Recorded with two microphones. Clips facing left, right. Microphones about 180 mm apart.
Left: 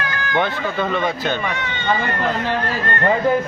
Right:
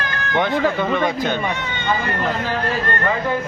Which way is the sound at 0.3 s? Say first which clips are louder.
Right 3 dB; 15° right (ahead or behind).